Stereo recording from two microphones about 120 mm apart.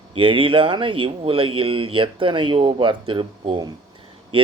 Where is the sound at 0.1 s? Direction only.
45° right (ahead or behind).